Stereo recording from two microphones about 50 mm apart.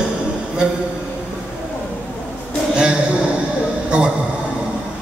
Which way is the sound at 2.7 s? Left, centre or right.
Centre.